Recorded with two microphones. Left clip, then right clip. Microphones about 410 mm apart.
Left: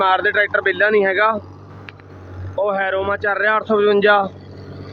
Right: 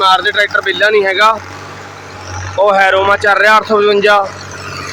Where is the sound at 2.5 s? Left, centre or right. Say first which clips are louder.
Right 10 dB; left.